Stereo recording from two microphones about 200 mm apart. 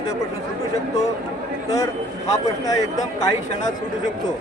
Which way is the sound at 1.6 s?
15° left (ahead or behind).